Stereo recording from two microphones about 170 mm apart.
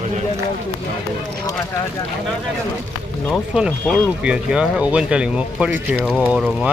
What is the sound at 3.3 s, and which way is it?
Speech, 5° right (ahead or behind).